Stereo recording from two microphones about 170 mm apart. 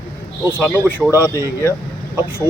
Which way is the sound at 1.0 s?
15° right (ahead or behind).